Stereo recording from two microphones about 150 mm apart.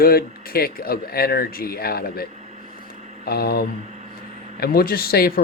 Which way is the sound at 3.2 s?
90° left.